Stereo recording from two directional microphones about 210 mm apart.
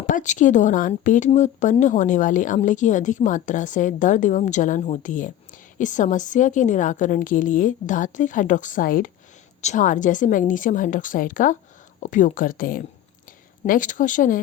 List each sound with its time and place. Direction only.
0.0 s speech: 35° left (ahead or behind)